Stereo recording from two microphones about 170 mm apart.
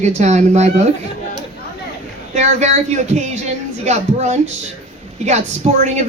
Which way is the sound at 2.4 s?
40° right (ahead or behind).